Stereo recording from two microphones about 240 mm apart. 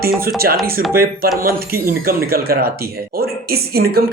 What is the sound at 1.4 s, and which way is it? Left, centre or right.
Speech, right.